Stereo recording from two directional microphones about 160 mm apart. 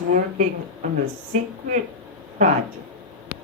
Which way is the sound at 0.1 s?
55° right (ahead or behind).